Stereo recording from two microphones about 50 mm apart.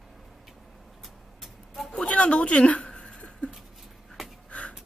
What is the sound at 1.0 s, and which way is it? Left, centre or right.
Vehicle, centre.